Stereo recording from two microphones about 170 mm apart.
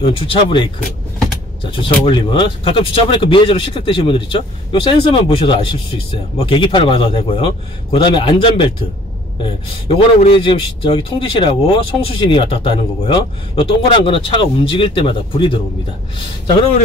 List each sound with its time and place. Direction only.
0.0 s speech: 30° left (ahead or behind)
9.8 s speech: 35° left (ahead or behind)